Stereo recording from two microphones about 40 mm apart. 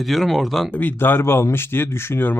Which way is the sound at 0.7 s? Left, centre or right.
Left.